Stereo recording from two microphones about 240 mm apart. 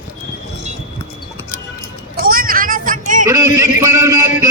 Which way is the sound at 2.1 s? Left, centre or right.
Right.